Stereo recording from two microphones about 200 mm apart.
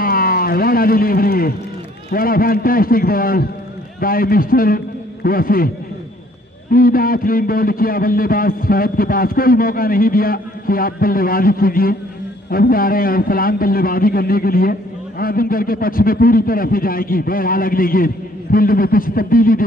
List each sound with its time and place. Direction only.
0.0 s a man's voice: 45° left (ahead or behind)
6.7 s a man's voice: 45° left (ahead or behind)